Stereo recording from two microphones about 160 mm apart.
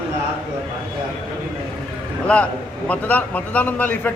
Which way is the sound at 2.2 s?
5° left (ahead or behind).